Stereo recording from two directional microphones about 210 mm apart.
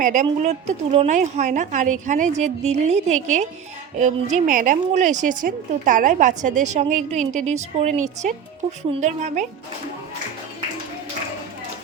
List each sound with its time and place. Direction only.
0.0 s a woman's voice: 35° right (ahead or behind)